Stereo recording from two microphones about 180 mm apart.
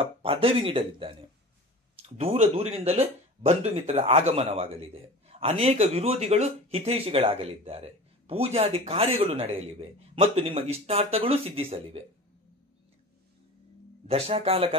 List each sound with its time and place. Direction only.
0.0 s speech: 30° right (ahead or behind)
14.0 s speech: 35° right (ahead or behind)